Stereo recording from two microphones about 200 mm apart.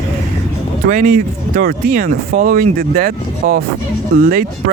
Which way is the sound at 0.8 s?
45° right (ahead or behind).